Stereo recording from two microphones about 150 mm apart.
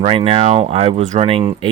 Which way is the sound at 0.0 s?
40° right (ahead or behind).